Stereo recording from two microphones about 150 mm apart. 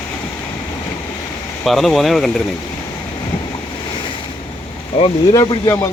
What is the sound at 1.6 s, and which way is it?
Speech, centre (ahead or behind).